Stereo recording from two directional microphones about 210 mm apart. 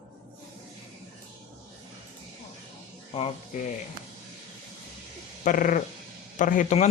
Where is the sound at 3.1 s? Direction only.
30° left (ahead or behind).